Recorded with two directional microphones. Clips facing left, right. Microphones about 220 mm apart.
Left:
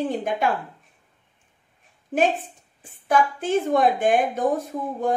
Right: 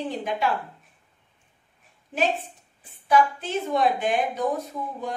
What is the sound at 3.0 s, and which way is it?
A woman's voice, 50° left (ahead or behind).